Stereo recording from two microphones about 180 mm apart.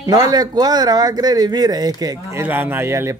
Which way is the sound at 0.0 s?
20° right (ahead or behind).